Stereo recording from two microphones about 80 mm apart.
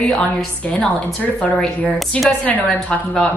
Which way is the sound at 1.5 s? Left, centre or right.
Centre.